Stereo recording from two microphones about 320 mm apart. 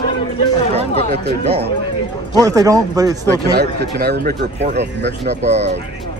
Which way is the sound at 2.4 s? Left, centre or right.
Centre.